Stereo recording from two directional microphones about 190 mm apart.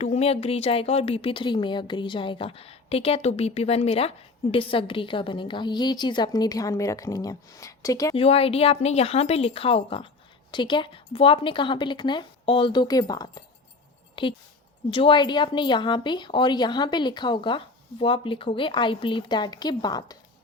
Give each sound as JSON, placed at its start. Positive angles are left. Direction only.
{"t": 0.0, "sound": "a woman's voice", "side_deg": 35}
{"t": 8.1, "sound": "a woman's voice", "side_deg": 30}